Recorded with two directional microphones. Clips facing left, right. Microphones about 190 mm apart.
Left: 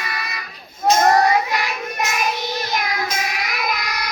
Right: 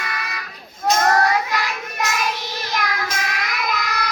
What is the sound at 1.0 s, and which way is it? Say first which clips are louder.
Child singing: left 2 dB; 20° left (ahead or behind).